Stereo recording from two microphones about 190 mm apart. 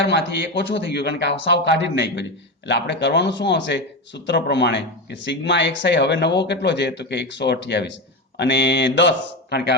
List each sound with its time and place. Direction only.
0.1 s a man's voice: 65° left (ahead or behind)